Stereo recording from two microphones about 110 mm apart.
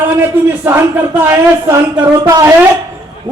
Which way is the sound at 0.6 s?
20° right (ahead or behind).